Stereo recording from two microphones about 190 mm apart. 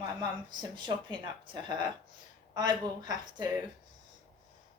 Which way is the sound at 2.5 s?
20° right (ahead or behind).